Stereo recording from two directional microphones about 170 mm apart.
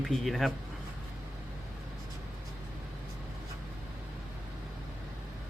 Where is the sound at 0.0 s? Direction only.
Centre (ahead or behind).